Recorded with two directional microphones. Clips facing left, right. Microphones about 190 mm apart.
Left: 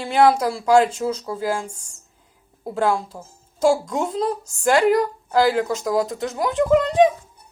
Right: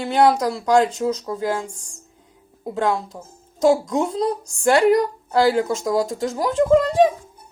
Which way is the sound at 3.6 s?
20° right (ahead or behind).